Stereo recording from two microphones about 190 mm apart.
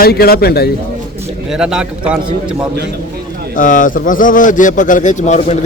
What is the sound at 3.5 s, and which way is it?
A man's voice, 45° left (ahead or behind).